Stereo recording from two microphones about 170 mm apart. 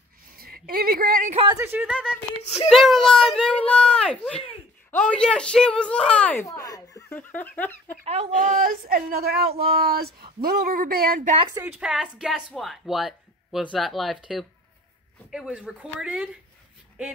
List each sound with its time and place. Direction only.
0.4 s a woman's voice: 60° right (ahead or behind)
1.5 s speech: 10° right (ahead or behind); by 6.3 s 5° left (ahead or behind)
6.4 s speech: 20° left (ahead or behind)
8.0 s speech: 40° right (ahead or behind)
11.3 s speech: 25° right (ahead or behind)
11.6 s speech: 5° right (ahead or behind)